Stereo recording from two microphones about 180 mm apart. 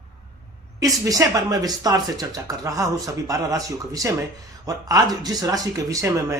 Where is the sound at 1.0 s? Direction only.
20° right (ahead or behind).